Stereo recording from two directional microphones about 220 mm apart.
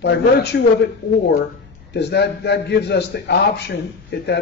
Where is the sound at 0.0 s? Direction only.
50° left (ahead or behind).